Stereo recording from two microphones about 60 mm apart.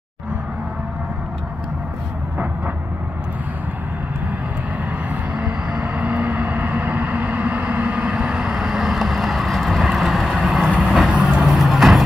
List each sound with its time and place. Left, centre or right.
5.1 s vehicle: right; by 11.1 s centre
11.2 s music: centre